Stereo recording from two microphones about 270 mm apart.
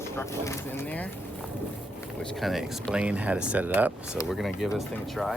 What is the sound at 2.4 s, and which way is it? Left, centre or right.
Speech, centre.